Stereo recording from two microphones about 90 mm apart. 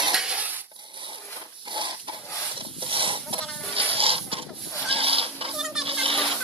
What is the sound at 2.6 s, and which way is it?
Chicken, 80° right.